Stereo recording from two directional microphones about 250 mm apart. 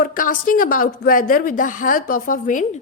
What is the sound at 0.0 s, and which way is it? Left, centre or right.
A woman's voice, left.